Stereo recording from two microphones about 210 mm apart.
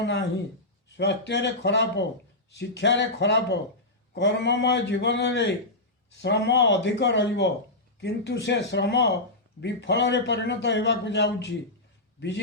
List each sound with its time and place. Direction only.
0.0 s a man's voice: 55° left (ahead or behind)